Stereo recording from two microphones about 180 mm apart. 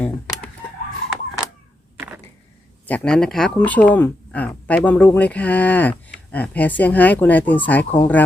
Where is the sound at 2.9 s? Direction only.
5° left (ahead or behind).